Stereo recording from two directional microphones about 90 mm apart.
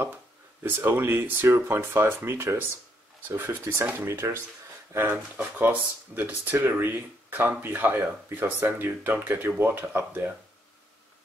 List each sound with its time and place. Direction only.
0.7 s speech: 25° right (ahead or behind)